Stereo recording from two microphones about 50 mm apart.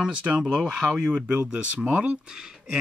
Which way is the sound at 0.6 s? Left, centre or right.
Centre.